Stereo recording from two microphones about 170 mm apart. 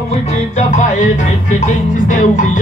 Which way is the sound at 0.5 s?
45° left (ahead or behind).